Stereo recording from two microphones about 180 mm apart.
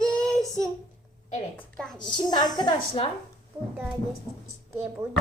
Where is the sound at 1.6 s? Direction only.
5° left (ahead or behind).